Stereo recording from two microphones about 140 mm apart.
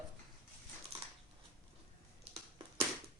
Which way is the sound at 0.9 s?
50° right (ahead or behind).